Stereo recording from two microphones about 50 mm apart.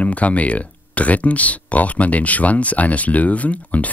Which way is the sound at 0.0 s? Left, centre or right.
Left.